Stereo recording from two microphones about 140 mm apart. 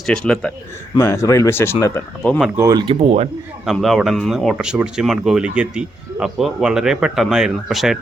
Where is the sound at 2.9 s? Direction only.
45° right (ahead or behind).